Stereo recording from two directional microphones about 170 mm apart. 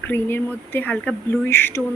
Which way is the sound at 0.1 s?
10° left (ahead or behind).